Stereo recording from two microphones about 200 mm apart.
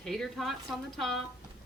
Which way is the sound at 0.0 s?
Centre (ahead or behind).